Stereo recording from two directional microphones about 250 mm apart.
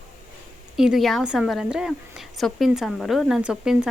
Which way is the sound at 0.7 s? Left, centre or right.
Centre.